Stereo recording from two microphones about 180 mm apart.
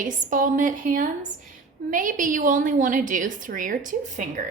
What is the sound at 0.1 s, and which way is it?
A woman's voice, 50° right (ahead or behind).